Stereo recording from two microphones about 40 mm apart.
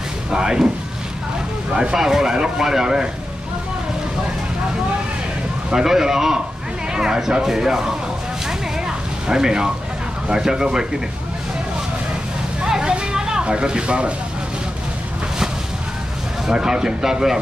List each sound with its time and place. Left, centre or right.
0.3 s speech: centre
1.7 s speech: centre
5.7 s speech: centre
6.9 s a sound: centre
7.4 s speech: centre
8.5 s a sound: centre
10.2 s speech: centre
12.6 s vehicle: centre
13.1 s speech: centre
16.4 s speech: centre